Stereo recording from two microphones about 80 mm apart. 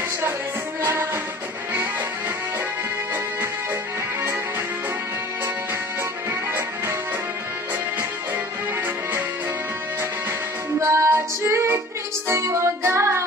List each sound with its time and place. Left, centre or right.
10.8 s music: right